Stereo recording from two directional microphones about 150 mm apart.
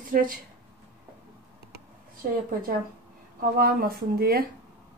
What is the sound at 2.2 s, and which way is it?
Speech, 70° right (ahead or behind).